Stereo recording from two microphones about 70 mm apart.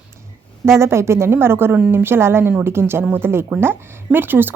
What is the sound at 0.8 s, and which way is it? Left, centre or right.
Speech, right.